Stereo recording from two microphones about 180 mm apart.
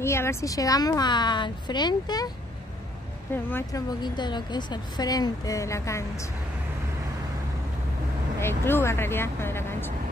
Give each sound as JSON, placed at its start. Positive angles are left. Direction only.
{"t": 0.0, "sound": "a woman's voice", "side_deg": 15}
{"t": 3.4, "sound": "speech", "side_deg": 10}
{"t": 4.0, "sound": "a woman's voice", "side_deg": 25}
{"t": 8.4, "sound": "speech", "side_deg": 15}